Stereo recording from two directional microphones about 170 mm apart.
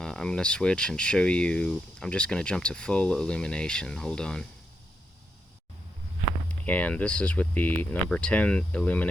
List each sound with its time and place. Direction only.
0.0 s speech: 5° left (ahead or behind)
6.7 s speech: 10° left (ahead or behind)